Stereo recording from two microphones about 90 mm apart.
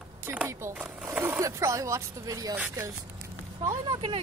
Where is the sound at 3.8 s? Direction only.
70° right (ahead or behind).